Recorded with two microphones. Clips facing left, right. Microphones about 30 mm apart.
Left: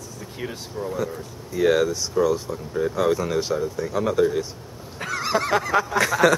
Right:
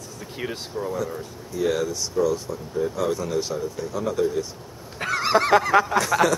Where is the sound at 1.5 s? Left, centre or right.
Left.